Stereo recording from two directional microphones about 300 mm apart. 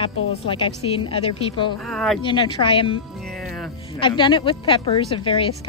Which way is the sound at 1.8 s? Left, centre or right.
Centre.